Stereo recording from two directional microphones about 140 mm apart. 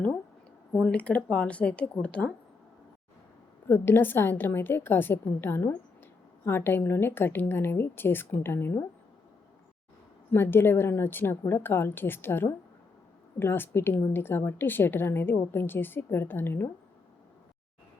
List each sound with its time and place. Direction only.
0.7 s a woman's voice: 10° left (ahead or behind)
3.7 s a woman's voice: 15° left (ahead or behind)
10.3 s a woman's voice: 15° left (ahead or behind)